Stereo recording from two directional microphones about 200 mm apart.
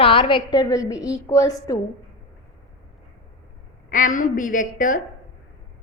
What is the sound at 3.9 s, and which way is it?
A woman's voice, 45° left (ahead or behind).